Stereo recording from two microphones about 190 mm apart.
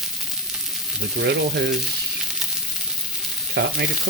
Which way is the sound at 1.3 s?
60° right (ahead or behind).